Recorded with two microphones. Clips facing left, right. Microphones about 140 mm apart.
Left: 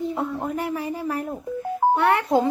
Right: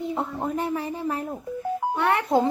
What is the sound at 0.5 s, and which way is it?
Speech, 20° right (ahead or behind).